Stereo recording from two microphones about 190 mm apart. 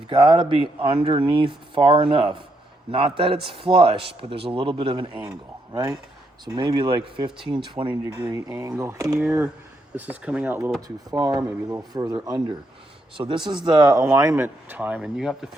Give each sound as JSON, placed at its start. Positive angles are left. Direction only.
{"t": 0.1, "sound": "speech", "side_deg": -25}